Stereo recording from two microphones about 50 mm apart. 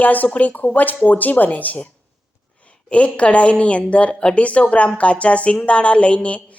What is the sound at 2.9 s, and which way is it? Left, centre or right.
A woman's voice, left.